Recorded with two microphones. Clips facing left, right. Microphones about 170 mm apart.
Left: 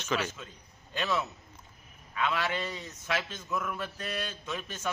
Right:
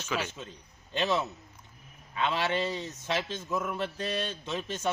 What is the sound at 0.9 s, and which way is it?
A man's voice, 25° right (ahead or behind).